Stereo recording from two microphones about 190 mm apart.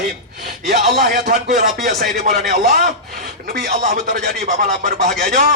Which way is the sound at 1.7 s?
Centre (ahead or behind).